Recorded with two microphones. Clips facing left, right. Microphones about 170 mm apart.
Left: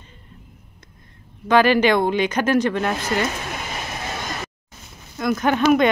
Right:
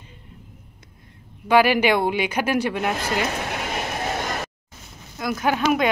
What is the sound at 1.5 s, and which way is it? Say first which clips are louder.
Speech: left 2 dB; 10° right (ahead or behind).